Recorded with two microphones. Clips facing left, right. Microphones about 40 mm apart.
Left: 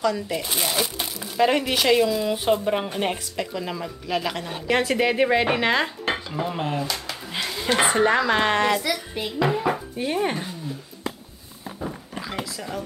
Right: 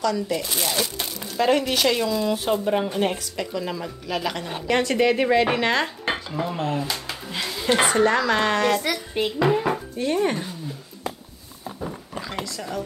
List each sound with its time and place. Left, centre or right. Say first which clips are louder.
0.0 s speech: right 1 dB; centre
6.1 s dishes: even; centre
6.5 s speech: right 2 dB; centre
6.8 s speech: even; centre
7.2 s a sound: right 1 dB; centre
7.8 s a child's voice: left 1 dB; centre
9.5 s speech: right 1 dB; centre
9.9 s speech: right 2 dB; centre
11.8 s a sound: even; centre